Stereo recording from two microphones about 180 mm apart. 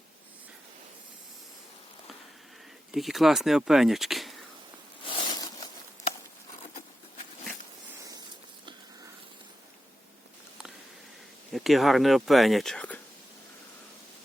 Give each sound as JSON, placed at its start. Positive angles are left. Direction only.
{"t": 2.9, "sound": "speech", "side_deg": 0}
{"t": 5.0, "sound": "a sound", "side_deg": 25}
{"t": 11.5, "sound": "speech", "side_deg": 0}